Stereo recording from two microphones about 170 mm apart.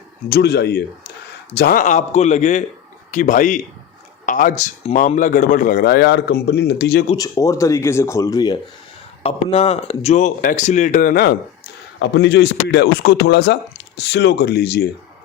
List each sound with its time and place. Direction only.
0.3 s a man's voice: 75° left (ahead or behind)
1.5 s a man's voice: 60° left (ahead or behind); by 7.0 s 75° left (ahead or behind)
7.2 s speech: 20° left (ahead or behind)
9.2 s speech: 35° left (ahead or behind); by 11.3 s 65° left (ahead or behind)
11.9 s a man's voice: 90° left; by 14.8 s 70° left (ahead or behind)